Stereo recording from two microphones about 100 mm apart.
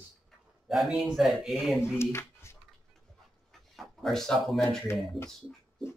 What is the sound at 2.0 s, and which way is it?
Speech, 25° left (ahead or behind).